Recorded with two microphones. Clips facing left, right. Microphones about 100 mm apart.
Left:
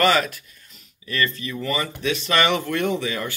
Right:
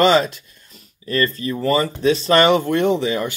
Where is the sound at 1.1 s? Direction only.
35° right (ahead or behind).